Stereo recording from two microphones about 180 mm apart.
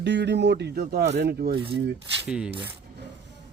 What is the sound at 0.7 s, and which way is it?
Speech, 55° right (ahead or behind).